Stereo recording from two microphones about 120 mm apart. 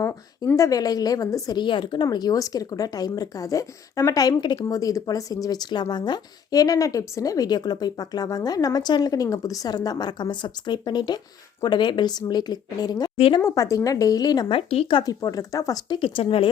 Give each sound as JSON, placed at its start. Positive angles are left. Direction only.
{"t": 0.0, "sound": "speech", "side_deg": 25}
{"t": 13.1, "sound": "speech", "side_deg": 50}
{"t": 13.4, "sound": "speech", "side_deg": 25}
{"t": 14.5, "sound": "speech", "side_deg": 50}
{"t": 15.0, "sound": "speech", "side_deg": 30}
{"t": 16.0, "sound": "speech", "side_deg": 50}